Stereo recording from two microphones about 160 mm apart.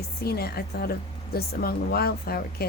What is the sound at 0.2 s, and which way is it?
A woman's voice, 75° left (ahead or behind).